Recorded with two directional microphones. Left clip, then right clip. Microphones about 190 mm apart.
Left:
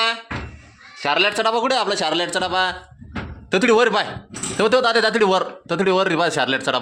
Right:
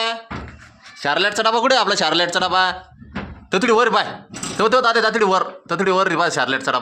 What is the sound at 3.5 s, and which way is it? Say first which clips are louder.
Speech: even; 15° left (ahead or behind).